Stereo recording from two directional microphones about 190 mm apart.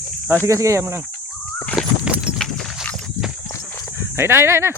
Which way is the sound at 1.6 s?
5° left (ahead or behind).